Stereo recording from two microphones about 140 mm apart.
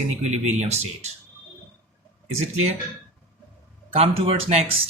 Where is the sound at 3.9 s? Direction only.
45° right (ahead or behind).